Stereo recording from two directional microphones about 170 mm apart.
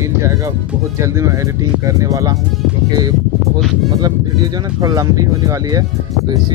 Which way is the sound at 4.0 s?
25° right (ahead or behind).